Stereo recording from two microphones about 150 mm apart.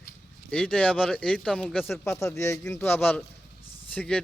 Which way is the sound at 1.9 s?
20° left (ahead or behind).